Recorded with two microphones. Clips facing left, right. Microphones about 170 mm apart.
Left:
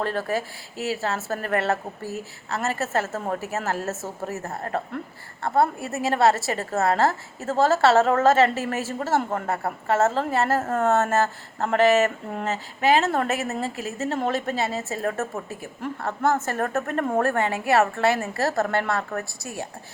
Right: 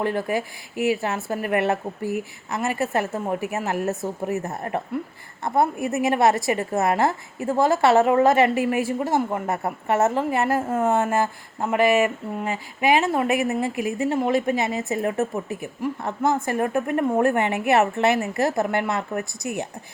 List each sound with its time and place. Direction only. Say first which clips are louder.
0.0 s a woman's voice: right 2 dB; 15° right (ahead or behind)